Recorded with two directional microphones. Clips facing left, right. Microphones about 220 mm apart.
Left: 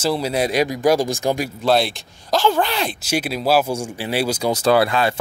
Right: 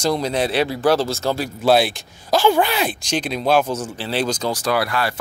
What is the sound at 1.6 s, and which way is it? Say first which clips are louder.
Speech: right 4 dB; 5° right (ahead or behind).